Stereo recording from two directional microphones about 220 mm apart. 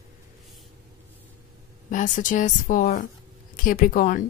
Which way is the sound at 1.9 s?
35° left (ahead or behind).